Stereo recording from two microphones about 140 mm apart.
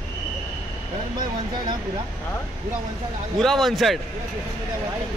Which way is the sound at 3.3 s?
Centre (ahead or behind).